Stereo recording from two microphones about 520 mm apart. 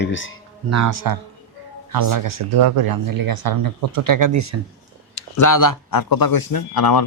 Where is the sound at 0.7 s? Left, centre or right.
Right.